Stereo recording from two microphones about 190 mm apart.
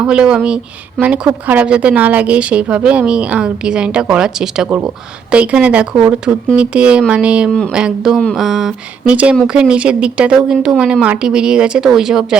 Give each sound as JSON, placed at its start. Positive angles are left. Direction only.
{"t": 0.0, "sound": "speech", "side_deg": -5}